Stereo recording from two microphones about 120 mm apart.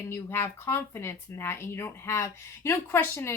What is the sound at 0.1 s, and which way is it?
Speech, 20° left (ahead or behind).